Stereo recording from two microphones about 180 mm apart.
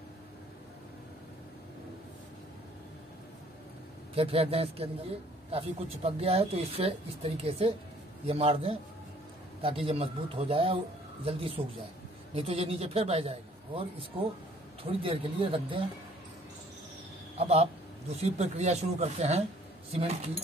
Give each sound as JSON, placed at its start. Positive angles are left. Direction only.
{"t": 4.1, "sound": "speech", "side_deg": -30}
{"t": 17.4, "sound": "speech", "side_deg": -35}